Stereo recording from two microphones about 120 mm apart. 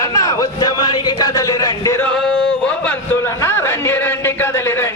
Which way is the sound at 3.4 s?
20° left (ahead or behind).